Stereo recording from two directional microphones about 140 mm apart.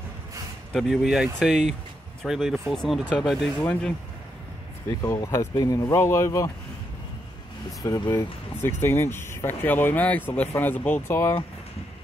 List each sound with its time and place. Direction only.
0.7 s speech: centre (ahead or behind)
5.0 s speech: 20° left (ahead or behind)
8.1 s speech: 20° left (ahead or behind)